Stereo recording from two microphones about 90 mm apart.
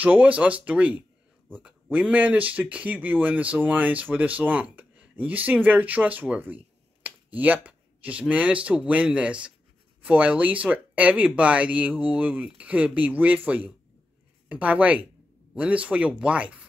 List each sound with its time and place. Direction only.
0.0 s speech: 15° right (ahead or behind)